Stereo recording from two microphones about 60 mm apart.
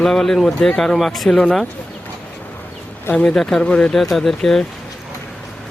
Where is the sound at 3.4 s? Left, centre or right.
Centre.